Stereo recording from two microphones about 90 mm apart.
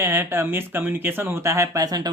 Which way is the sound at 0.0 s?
25° right (ahead or behind).